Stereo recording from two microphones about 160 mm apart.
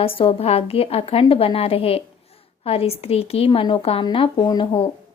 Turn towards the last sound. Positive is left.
turn(degrees=30)  # may be behind; listen again after turning